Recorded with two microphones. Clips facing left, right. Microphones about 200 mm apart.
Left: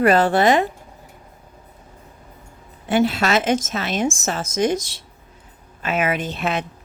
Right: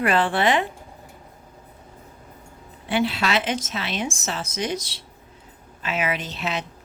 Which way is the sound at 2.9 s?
45° left (ahead or behind).